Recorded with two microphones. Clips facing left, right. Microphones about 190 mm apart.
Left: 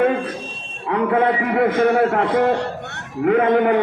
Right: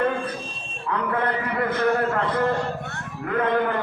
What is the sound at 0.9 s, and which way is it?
A man's voice, 85° left.